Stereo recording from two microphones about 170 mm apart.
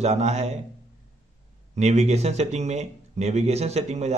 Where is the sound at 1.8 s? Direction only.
40° right (ahead or behind).